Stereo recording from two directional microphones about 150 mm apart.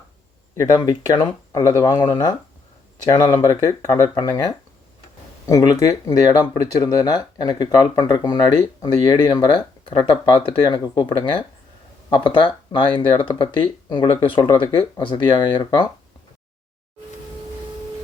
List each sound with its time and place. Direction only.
0.5 s speech: 25° left (ahead or behind)